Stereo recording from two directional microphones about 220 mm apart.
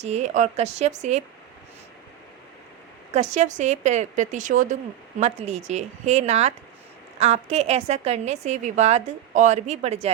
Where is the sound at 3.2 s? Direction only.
30° right (ahead or behind).